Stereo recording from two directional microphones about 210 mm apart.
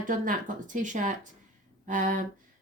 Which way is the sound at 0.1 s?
40° right (ahead or behind).